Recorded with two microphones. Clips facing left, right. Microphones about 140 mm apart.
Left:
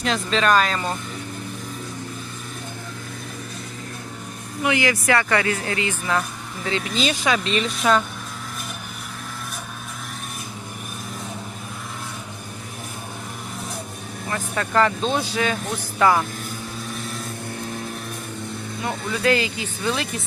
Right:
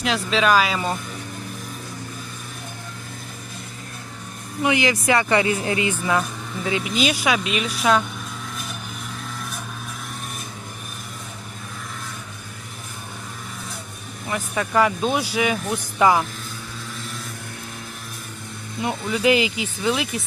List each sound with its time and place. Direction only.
0.0 s speech: 5° right (ahead or behind)
4.6 s speech: 20° right (ahead or behind); by 8.0 s 5° right (ahead or behind)
14.3 s speech: 10° right (ahead or behind)
18.8 s speech: 15° right (ahead or behind)